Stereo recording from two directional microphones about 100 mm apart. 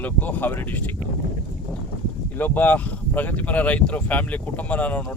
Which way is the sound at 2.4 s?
15° left (ahead or behind).